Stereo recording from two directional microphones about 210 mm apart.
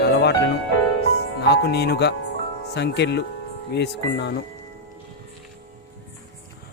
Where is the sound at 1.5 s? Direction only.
50° left (ahead or behind).